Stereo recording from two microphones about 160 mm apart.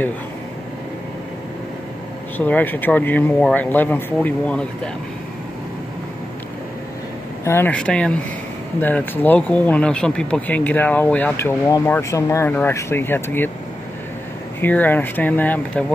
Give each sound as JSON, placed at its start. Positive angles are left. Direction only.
{"t": 2.3, "sound": "speech", "side_deg": 10}
{"t": 7.4, "sound": "speech", "side_deg": 15}
{"t": 14.6, "sound": "speech", "side_deg": 10}